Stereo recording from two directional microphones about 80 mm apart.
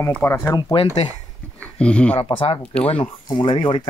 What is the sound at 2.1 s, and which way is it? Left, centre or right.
Speech, left.